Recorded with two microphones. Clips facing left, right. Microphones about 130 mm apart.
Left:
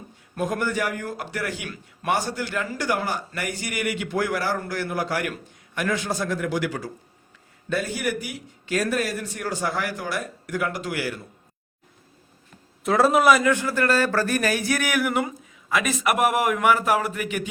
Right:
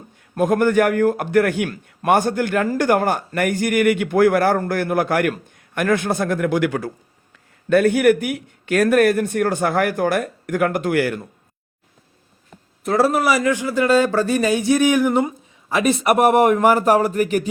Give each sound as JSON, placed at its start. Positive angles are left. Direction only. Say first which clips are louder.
{"t": 0.3, "sound": "a man's voice", "louder": "right 10 dB", "side_deg": -55}
{"t": 12.8, "sound": "a man's voice", "louder": "right 1 dB", "side_deg": 0}
{"t": 13.6, "sound": "a man's voice", "louder": "right 6 dB", "side_deg": -15}